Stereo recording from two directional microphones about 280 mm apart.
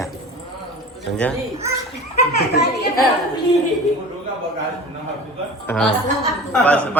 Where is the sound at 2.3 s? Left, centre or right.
Left.